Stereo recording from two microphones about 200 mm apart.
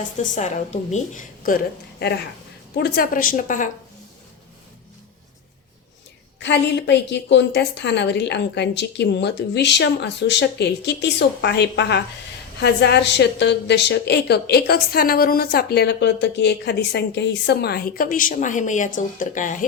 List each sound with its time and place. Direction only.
0.2 s a woman's voice: 35° left (ahead or behind)
6.4 s a woman's voice: 60° left (ahead or behind); by 19.5 s 40° left (ahead or behind)